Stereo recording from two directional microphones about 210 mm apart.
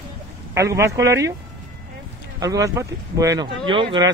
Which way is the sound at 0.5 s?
15° right (ahead or behind).